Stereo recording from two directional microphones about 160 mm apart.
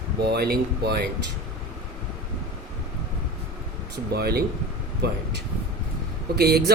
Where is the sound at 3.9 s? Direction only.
90° right.